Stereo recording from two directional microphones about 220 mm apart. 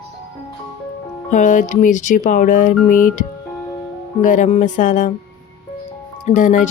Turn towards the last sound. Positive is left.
turn(degrees=35)  # may be behind; listen again after turning